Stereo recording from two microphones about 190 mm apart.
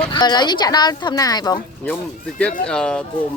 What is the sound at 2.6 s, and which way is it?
Speech, 5° left (ahead or behind).